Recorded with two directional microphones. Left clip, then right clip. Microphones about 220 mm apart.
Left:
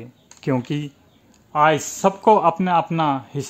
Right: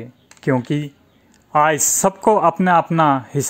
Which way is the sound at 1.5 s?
25° right (ahead or behind).